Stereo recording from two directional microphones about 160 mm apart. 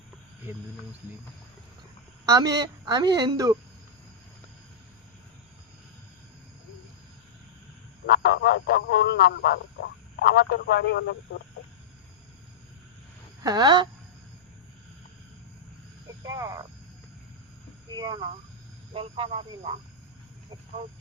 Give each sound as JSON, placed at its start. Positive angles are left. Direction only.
{"t": 2.2, "sound": "speech", "side_deg": -20}
{"t": 8.0, "sound": "speech", "side_deg": 85}
{"t": 13.4, "sound": "speech", "side_deg": -25}
{"t": 16.2, "sound": "speech", "side_deg": -20}
{"t": 17.8, "sound": "speech", "side_deg": -25}